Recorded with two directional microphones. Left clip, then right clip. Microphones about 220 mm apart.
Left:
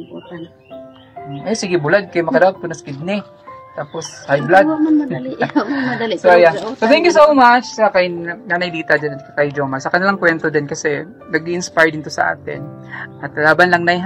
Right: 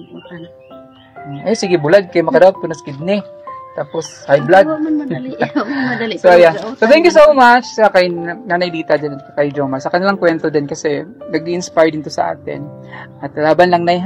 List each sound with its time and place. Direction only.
1.4 s a woman's voice: 30° right (ahead or behind)